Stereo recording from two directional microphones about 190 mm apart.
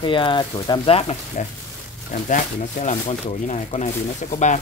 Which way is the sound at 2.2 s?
40° left (ahead or behind).